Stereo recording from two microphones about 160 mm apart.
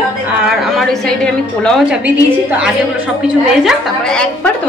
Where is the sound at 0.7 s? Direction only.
5° left (ahead or behind).